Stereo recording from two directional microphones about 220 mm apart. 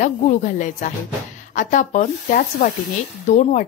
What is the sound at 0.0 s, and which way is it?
A woman's voice, 35° left (ahead or behind).